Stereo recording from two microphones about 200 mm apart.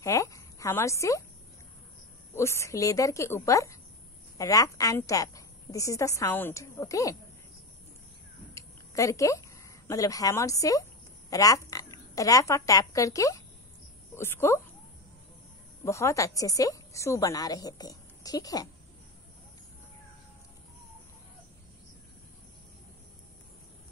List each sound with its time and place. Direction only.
0.0 s speech: 15° left (ahead or behind)
2.3 s a woman's voice: 15° left (ahead or behind)
8.5 s a woman's voice: 15° left (ahead or behind)
15.8 s a woman's voice: 15° left (ahead or behind)